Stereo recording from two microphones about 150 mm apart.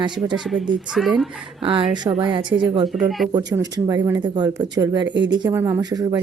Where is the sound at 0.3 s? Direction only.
5° right (ahead or behind).